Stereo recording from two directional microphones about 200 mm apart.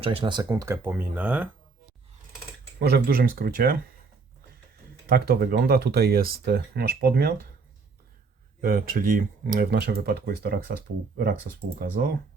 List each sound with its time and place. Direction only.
0.0 s speech: 30° right (ahead or behind); by 1.5 s 10° right (ahead or behind)
2.7 s speech: 55° right (ahead or behind)
5.0 s speech: 50° right (ahead or behind)
8.6 s speech: 45° right (ahead or behind)